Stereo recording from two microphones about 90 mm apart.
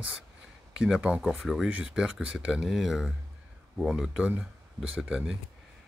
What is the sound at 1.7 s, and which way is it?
Speech, 10° right (ahead or behind).